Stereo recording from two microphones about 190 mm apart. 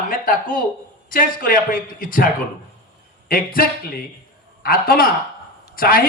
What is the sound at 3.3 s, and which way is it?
A man's voice, 50° left (ahead or behind).